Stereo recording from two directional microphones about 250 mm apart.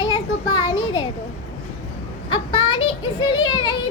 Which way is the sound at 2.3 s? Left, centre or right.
Centre.